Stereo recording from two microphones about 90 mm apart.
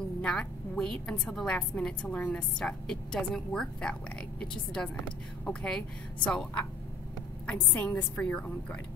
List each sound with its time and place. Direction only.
0.2 s a woman's voice: 10° left (ahead or behind)